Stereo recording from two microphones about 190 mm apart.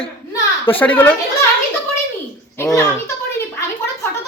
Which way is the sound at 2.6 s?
15° left (ahead or behind).